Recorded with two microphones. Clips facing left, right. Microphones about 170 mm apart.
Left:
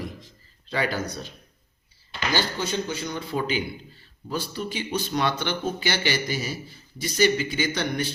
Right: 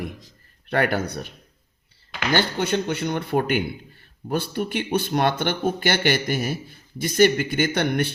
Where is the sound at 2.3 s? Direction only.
60° right (ahead or behind).